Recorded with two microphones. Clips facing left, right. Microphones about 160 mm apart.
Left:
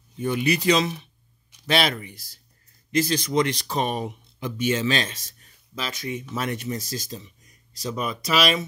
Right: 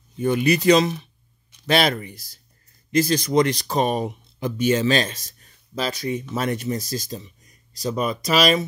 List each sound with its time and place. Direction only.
0.2 s speech: 45° right (ahead or behind)